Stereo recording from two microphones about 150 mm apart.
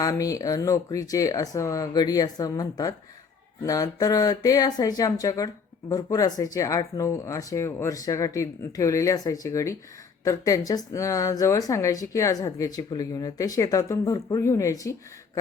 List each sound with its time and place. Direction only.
0.0 s speech: 25° left (ahead or behind)